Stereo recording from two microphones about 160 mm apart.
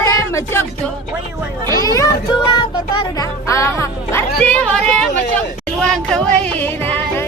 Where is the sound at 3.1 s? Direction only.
20° left (ahead or behind).